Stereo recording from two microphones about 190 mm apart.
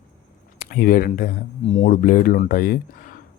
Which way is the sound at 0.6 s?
50° left (ahead or behind).